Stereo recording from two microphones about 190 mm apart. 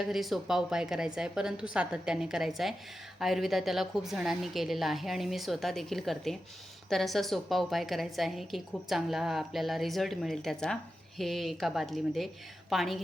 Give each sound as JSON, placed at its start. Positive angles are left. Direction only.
{"t": 0.0, "sound": "a woman's voice", "side_deg": 0}